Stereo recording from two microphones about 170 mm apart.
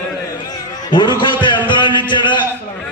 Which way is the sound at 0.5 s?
25° left (ahead or behind).